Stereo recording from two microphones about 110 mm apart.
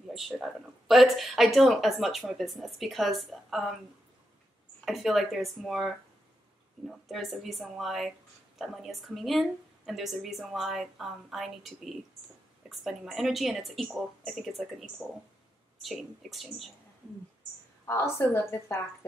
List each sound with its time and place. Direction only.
0.1 s speech: centre (ahead or behind)
4.8 s speech: centre (ahead or behind)
6.9 s speech: centre (ahead or behind)
17.8 s a woman's voice: 20° left (ahead or behind)